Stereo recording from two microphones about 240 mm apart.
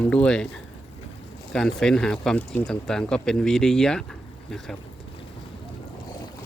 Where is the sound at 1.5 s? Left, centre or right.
Centre.